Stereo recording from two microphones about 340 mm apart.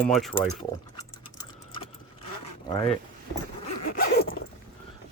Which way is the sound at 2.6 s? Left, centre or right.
Centre.